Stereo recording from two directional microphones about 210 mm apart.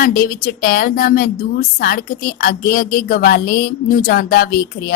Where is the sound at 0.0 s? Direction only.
40° left (ahead or behind).